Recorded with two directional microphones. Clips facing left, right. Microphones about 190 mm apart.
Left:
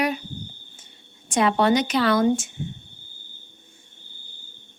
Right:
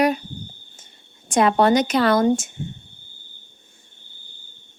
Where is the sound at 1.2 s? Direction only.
45° right (ahead or behind).